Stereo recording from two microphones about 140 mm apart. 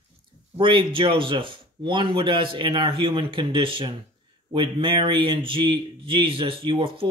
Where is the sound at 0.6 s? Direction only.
35° right (ahead or behind).